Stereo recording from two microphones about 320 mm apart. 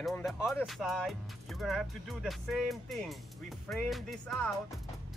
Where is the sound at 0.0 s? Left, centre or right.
Centre.